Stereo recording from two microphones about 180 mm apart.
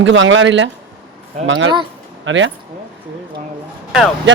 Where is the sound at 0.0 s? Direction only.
90° right.